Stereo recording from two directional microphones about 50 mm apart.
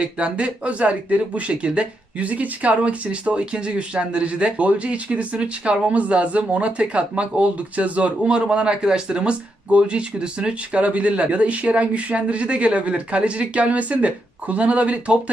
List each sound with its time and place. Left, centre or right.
0.0 s speech: right